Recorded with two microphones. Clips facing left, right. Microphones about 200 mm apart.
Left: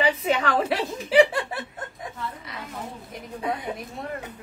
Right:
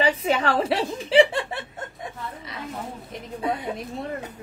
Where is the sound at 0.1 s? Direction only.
30° right (ahead or behind).